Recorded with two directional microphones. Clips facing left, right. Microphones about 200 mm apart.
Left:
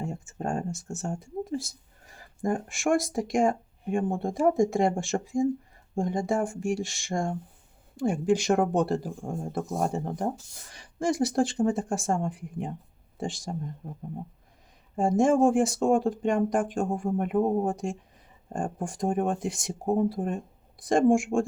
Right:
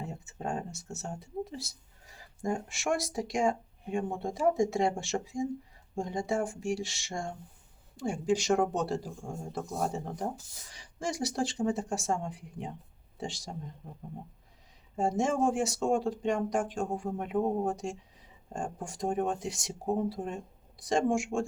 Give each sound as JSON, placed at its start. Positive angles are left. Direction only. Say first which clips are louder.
{"t": 0.0, "sound": "speech", "louder": "left 5 dB", "side_deg": 50}